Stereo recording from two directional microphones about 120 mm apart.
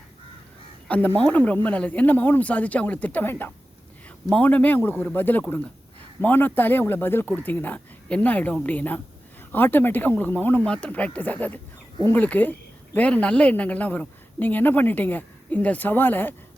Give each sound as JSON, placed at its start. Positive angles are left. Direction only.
{"t": 0.9, "sound": "speech", "side_deg": 10}